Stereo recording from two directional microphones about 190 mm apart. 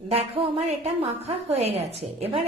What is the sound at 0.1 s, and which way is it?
A woman's voice, 30° right (ahead or behind).